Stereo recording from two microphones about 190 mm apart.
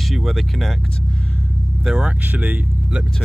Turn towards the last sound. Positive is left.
turn(degrees=-5)  # may be behind; listen again after turning